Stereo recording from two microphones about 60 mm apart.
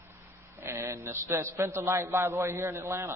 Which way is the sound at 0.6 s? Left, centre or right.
Right.